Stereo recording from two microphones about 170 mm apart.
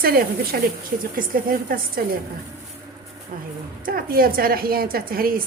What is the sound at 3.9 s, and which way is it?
A woman's voice, 60° right (ahead or behind).